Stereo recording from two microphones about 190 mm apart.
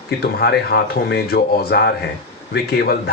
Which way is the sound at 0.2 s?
55° left (ahead or behind).